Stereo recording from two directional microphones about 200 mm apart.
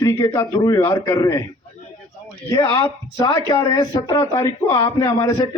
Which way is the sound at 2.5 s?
20° left (ahead or behind).